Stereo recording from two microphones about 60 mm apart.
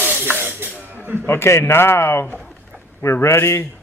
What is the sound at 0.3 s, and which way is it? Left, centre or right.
Music, right.